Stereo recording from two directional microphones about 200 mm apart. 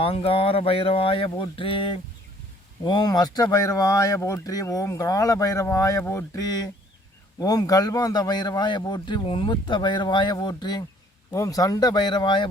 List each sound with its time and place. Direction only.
0.0 s a man's voice: 30° left (ahead or behind)